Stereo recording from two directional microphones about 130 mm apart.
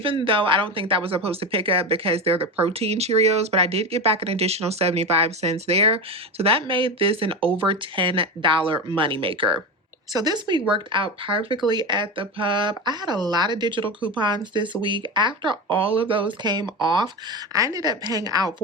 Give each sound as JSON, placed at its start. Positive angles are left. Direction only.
{"t": 0.3, "sound": "a woman's voice", "side_deg": -40}